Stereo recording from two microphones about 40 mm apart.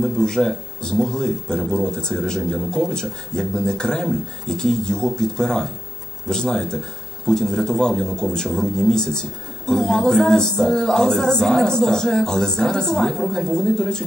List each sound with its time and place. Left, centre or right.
0.0 s speech: centre